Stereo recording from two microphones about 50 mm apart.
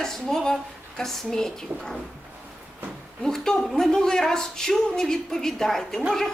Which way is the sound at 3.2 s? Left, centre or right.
Centre.